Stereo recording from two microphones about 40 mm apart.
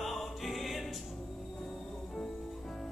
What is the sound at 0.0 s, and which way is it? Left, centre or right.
Music, centre.